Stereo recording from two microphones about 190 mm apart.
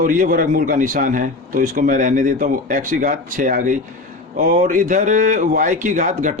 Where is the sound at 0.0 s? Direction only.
45° right (ahead or behind).